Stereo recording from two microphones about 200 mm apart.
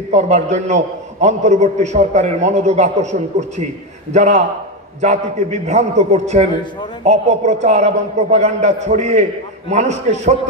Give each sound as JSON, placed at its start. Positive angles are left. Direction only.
{"t": 0.1, "sound": "a man's voice", "side_deg": -35}